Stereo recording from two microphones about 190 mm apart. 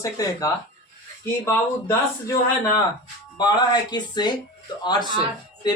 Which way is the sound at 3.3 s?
25° left (ahead or behind).